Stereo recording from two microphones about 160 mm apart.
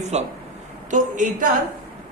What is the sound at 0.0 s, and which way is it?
A man's voice, 45° right (ahead or behind).